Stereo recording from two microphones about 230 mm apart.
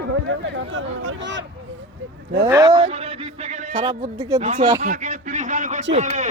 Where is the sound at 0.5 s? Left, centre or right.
Right.